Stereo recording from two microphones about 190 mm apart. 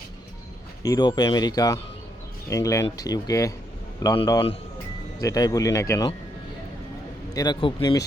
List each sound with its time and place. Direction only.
0.8 s speech: 20° left (ahead or behind)
7.3 s speech: 25° left (ahead or behind)